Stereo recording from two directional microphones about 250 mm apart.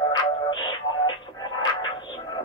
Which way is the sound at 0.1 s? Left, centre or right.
Centre.